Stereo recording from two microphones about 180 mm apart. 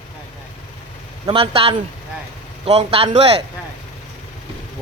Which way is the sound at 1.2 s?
30° right (ahead or behind).